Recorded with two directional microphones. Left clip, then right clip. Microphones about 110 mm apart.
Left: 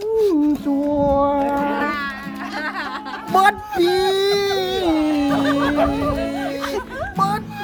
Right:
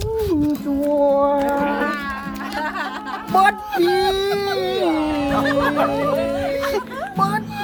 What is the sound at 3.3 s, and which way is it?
A woman's voice, 25° left (ahead or behind).